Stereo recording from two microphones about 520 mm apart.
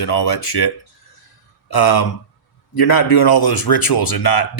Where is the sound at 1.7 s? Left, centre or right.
Left.